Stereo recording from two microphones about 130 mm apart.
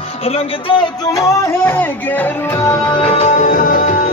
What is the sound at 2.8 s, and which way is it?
Music, 40° left (ahead or behind).